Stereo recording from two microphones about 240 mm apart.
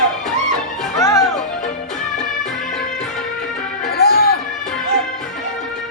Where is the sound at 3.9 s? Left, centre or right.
Left.